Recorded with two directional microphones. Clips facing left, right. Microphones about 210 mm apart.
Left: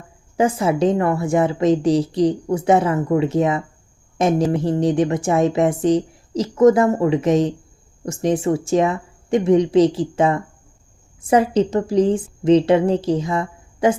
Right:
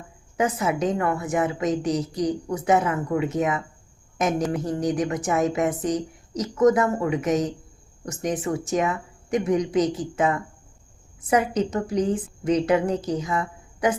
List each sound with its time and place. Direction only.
0.3 s speech: 30° left (ahead or behind)